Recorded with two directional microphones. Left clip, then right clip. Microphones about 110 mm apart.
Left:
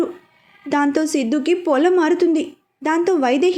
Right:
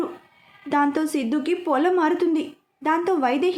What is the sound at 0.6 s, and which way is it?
A woman's voice, 30° left (ahead or behind).